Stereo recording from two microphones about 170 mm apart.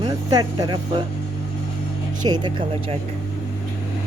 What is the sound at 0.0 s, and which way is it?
Speech, 20° right (ahead or behind).